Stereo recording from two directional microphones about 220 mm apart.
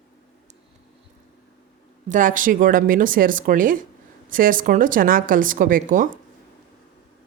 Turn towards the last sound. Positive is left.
turn(degrees=-40)  # may be behind; listen again after turning